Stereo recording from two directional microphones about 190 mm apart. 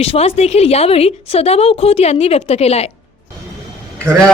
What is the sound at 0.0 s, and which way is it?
A woman's voice, 30° left (ahead or behind).